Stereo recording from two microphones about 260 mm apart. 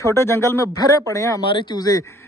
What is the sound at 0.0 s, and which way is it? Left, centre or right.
Speech, centre.